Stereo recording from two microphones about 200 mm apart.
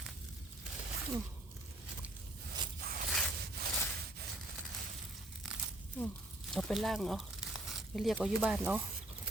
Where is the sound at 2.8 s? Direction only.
45° right (ahead or behind).